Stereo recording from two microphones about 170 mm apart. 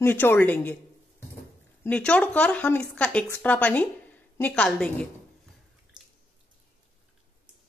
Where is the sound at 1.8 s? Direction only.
5° left (ahead or behind).